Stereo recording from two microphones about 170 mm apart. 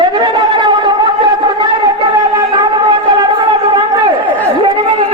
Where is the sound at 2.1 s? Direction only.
25° right (ahead or behind).